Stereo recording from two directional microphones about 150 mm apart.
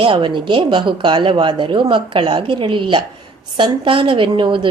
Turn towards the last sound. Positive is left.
turn(degrees=-30)  # may be behind; listen again after turning